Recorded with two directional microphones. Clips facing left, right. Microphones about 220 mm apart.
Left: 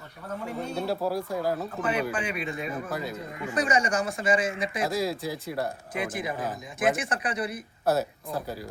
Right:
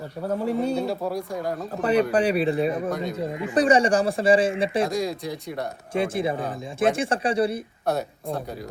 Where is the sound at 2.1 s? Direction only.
35° right (ahead or behind).